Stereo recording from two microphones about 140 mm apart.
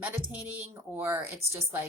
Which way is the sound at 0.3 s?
10° right (ahead or behind).